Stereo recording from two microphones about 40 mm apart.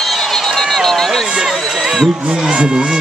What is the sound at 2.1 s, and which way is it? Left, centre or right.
Speech, centre.